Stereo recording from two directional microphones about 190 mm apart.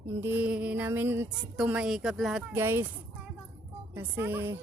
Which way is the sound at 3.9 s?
10° right (ahead or behind).